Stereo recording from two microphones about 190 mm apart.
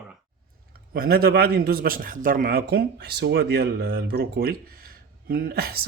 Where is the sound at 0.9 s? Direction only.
55° right (ahead or behind).